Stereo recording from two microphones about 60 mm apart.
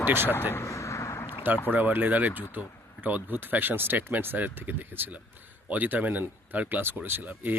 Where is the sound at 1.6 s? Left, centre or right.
Right.